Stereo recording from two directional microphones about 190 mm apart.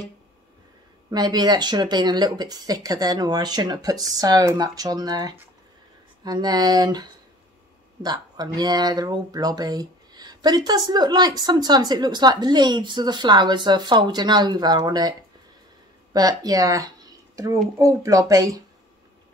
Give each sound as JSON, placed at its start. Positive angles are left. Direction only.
{"t": 1.1, "sound": "speech", "side_deg": -20}